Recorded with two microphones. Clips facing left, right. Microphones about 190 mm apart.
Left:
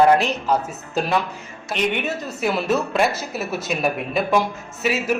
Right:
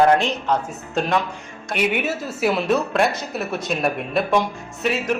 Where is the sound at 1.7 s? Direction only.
5° right (ahead or behind).